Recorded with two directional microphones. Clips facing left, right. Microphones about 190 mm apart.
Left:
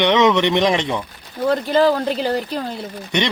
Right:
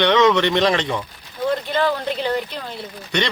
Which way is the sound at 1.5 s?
40° left (ahead or behind).